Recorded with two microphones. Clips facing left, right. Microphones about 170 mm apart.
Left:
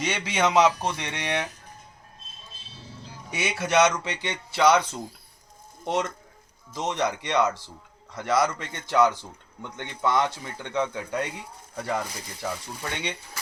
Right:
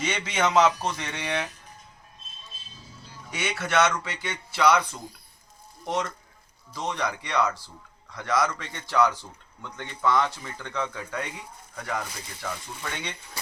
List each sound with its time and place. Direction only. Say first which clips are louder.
0.0 s speech: left 1 dB; 10° left (ahead or behind)
3.4 s speech: left 3 dB; 20° left (ahead or behind)